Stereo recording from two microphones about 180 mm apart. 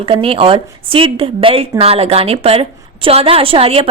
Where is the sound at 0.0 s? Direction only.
30° right (ahead or behind).